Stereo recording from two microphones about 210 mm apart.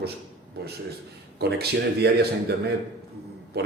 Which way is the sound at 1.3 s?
50° right (ahead or behind).